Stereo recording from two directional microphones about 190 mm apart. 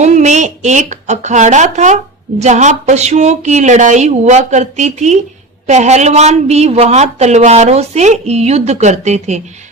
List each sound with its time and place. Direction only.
0.0 s a woman's voice: 35° right (ahead or behind)